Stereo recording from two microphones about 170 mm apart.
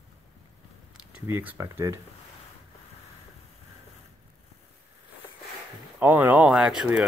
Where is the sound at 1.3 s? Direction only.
10° right (ahead or behind).